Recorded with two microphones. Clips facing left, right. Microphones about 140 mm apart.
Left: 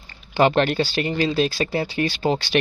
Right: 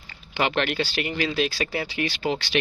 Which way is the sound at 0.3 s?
40° left (ahead or behind).